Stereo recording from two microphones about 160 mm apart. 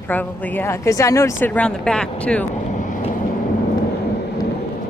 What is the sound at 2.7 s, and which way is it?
Boat, 55° left (ahead or behind).